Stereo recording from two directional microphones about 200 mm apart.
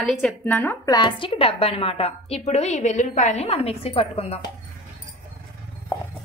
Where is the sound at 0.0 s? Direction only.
Centre (ahead or behind); by 4.5 s 30° left (ahead or behind).